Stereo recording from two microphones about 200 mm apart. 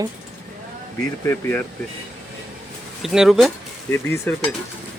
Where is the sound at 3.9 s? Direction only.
10° left (ahead or behind).